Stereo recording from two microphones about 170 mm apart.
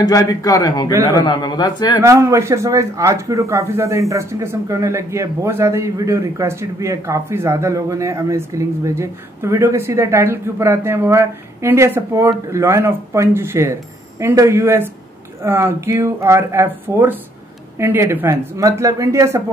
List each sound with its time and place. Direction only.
0.0 s a man's voice: 20° left (ahead or behind)
2.0 s speech: 15° right (ahead or behind)